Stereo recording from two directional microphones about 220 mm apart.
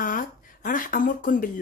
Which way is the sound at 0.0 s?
40° left (ahead or behind).